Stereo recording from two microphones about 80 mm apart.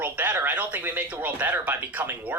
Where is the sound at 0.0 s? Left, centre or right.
Right.